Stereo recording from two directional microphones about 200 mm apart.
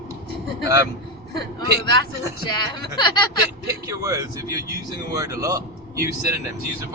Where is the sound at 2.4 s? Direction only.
20° left (ahead or behind).